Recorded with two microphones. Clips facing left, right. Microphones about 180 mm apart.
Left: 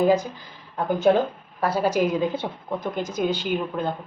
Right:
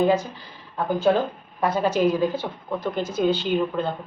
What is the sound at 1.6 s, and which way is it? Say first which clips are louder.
A woman's voice: right 1 dB; 10° left (ahead or behind).